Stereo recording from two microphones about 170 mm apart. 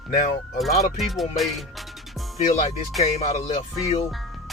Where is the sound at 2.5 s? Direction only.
45° left (ahead or behind).